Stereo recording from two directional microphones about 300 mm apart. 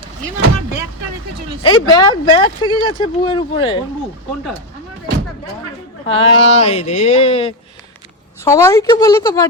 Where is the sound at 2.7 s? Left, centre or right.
Centre.